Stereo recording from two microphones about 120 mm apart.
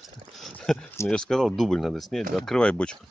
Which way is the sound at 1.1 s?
5° left (ahead or behind).